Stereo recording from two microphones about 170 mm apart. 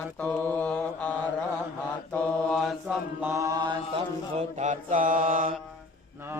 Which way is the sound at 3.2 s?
15° right (ahead or behind).